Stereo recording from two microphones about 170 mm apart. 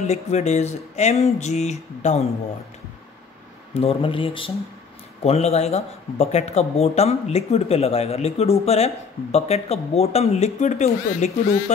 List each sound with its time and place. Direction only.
0.0 s speech: 40° left (ahead or behind)
3.7 s speech: 35° left (ahead or behind)